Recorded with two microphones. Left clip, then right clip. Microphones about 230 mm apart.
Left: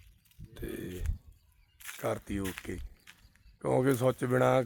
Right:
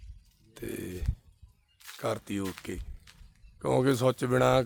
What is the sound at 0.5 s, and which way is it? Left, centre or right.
Burping, centre.